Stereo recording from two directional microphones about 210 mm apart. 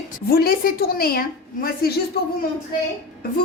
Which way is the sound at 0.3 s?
45° left (ahead or behind).